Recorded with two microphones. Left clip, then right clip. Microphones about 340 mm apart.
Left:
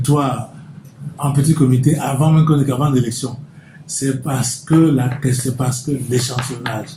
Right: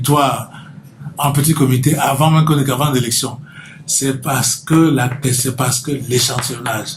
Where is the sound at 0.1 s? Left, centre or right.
Right.